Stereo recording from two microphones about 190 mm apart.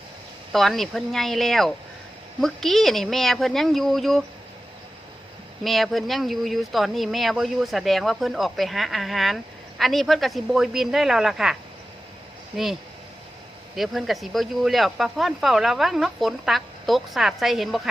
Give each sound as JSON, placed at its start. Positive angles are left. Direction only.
{"t": 0.5, "sound": "speech", "side_deg": 0}
{"t": 5.6, "sound": "speech", "side_deg": 0}
{"t": 13.7, "sound": "speech", "side_deg": 0}